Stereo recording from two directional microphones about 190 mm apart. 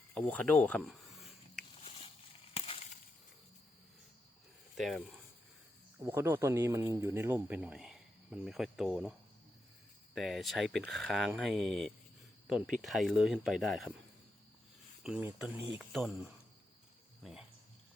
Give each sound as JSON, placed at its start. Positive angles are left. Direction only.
{"t": 0.1, "sound": "speech", "side_deg": 10}
{"t": 0.9, "sound": "a sound", "side_deg": 0}
{"t": 1.8, "sound": "a sound", "side_deg": 30}
{"t": 4.8, "sound": "speech", "side_deg": 0}
{"t": 6.0, "sound": "speech", "side_deg": -10}
{"t": 10.2, "sound": "speech", "side_deg": 0}
{"t": 15.0, "sound": "speech", "side_deg": -5}
{"t": 17.2, "sound": "speech", "side_deg": 0}